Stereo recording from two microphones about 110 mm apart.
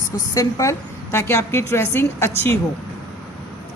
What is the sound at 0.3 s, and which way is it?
A woman's voice, 30° left (ahead or behind).